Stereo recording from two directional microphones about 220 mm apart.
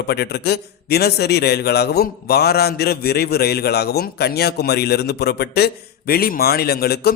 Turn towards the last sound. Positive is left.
turn(degrees=45)  # may be behind; listen again after turning